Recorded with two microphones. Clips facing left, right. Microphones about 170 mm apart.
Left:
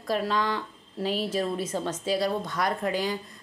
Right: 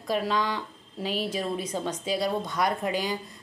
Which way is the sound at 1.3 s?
15° right (ahead or behind).